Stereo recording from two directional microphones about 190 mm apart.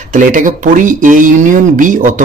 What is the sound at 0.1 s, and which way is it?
Speech, 45° right (ahead or behind).